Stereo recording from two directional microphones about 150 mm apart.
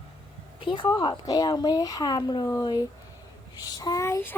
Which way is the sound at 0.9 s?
30° left (ahead or behind).